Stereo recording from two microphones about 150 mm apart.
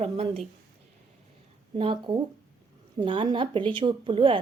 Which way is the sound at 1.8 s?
35° right (ahead or behind).